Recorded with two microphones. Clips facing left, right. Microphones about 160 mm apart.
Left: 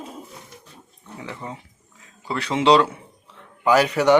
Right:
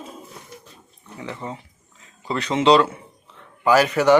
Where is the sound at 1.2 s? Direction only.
15° right (ahead or behind).